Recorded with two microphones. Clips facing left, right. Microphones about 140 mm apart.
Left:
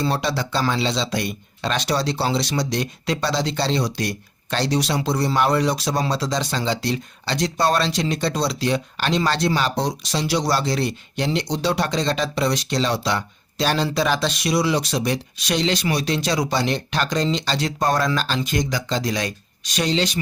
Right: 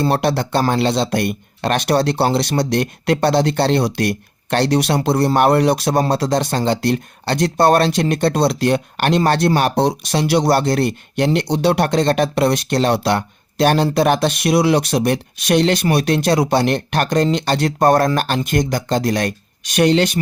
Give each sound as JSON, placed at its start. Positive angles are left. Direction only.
{"t": 0.0, "sound": "speech", "side_deg": -60}